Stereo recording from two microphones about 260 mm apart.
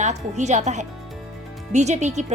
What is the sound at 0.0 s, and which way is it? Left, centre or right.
Speech, right.